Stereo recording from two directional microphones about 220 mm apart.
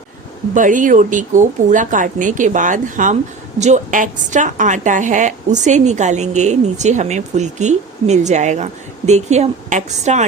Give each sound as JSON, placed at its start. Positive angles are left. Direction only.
{"t": 0.5, "sound": "a woman's voice", "side_deg": -35}